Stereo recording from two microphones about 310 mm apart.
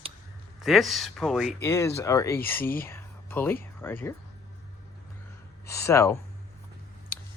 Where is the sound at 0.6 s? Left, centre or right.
Centre.